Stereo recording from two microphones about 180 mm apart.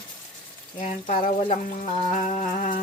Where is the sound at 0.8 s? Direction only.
45° left (ahead or behind).